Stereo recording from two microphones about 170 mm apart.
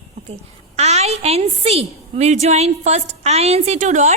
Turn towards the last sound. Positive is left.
turn(degrees=-45)  # may be behind; listen again after turning